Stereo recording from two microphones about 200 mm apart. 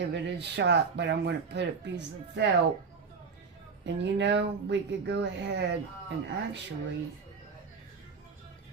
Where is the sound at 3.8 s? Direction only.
60° right (ahead or behind).